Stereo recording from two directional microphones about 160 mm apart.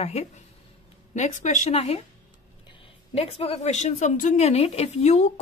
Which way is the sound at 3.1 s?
40° left (ahead or behind).